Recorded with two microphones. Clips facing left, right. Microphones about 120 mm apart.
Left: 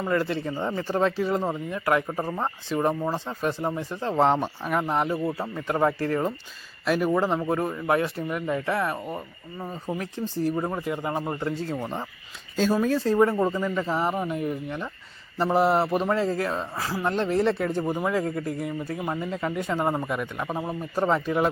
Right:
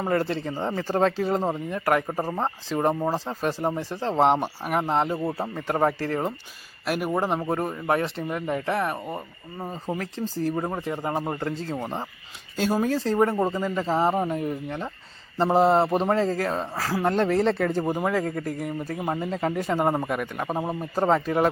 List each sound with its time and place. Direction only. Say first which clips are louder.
0.0 s speech: right 1 dB; 35° right (ahead or behind)
4.2 s speech: right 1 dB; 15° right (ahead or behind)
6.8 s speech: left 2 dB; 10° right (ahead or behind)
7.5 s speech: left 1 dB; 30° right (ahead or behind)
12.5 s speech: left 1 dB; 15° right (ahead or behind)
12.8 s speech: left 1 dB; 30° right (ahead or behind); by 20.5 s 50° right (ahead or behind)
20.5 s speech: right 2 dB; 30° right (ahead or behind)